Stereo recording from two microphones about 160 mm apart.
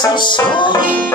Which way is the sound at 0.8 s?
60° right (ahead or behind).